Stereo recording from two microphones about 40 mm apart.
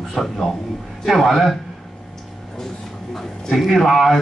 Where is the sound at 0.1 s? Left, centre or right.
Centre.